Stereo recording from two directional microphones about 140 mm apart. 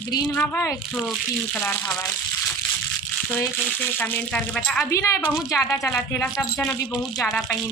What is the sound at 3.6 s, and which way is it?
Speech, 10° left (ahead or behind).